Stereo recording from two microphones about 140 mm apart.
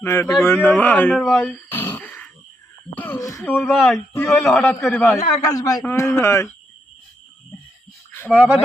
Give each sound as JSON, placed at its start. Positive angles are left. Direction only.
{"t": 0.0, "sound": "speech", "side_deg": 15}
{"t": 1.7, "sound": "throat clearing", "side_deg": 15}
{"t": 2.9, "sound": "speech", "side_deg": 10}
{"t": 3.2, "sound": "speech", "side_deg": 25}
{"t": 3.7, "sound": "speech", "side_deg": 0}
{"t": 3.9, "sound": "speech", "side_deg": 20}
{"t": 4.3, "sound": "speech", "side_deg": 5}
{"t": 5.5, "sound": "speech", "side_deg": 25}
{"t": 8.1, "sound": "speech", "side_deg": 10}